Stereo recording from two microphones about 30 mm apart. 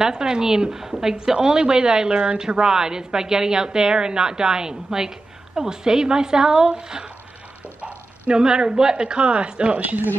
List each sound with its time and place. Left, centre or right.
0.0 s speech: right
8.4 s a woman's voice: right
9.8 s speech: right